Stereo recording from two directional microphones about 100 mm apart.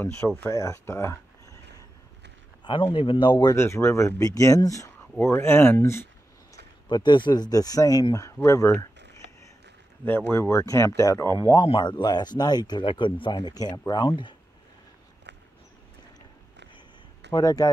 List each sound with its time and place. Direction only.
0.5 s speech: 30° left (ahead or behind)
2.6 s speech: 60° left (ahead or behind)
3.4 s speech: 25° left (ahead or behind)
6.9 s speech: 50° left (ahead or behind); by 8.7 s 30° left (ahead or behind)
10.0 s speech: 20° left (ahead or behind)
11.6 s speech: 55° left (ahead or behind)
17.3 s speech: 40° left (ahead or behind)